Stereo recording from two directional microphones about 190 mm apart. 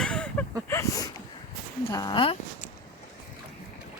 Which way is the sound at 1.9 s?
20° left (ahead or behind).